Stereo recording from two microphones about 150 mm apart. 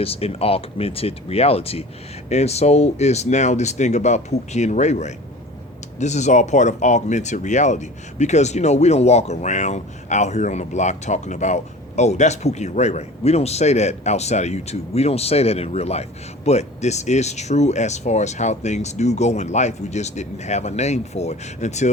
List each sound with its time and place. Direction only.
0.0 s speech: 40° left (ahead or behind)